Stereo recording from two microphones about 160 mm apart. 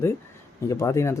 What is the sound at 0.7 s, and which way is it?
Speech, 20° left (ahead or behind).